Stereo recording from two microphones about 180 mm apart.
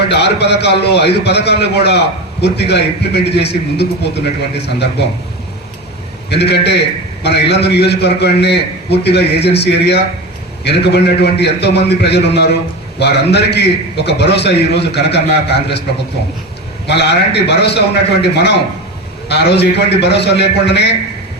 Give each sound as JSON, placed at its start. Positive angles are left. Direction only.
{"t": 0.1, "sound": "a man's voice", "side_deg": 70}
{"t": 6.3, "sound": "a man's voice", "side_deg": 65}
{"t": 16.8, "sound": "a man's voice", "side_deg": 70}